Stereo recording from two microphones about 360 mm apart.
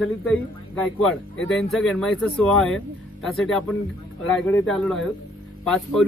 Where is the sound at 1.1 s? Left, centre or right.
Left.